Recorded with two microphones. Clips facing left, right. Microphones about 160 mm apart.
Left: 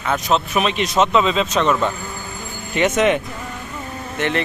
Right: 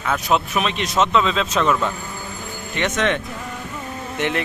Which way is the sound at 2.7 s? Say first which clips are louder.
Left 5 dB; 10° left (ahead or behind).